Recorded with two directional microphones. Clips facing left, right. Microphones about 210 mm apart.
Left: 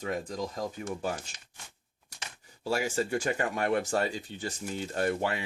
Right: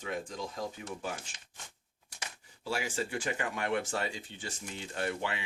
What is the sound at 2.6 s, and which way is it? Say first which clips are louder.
Speech: left 5 dB; 40° left (ahead or behind).